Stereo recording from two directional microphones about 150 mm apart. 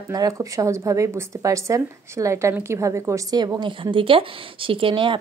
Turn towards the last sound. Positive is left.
turn(degrees=-35)  # may be behind; listen again after turning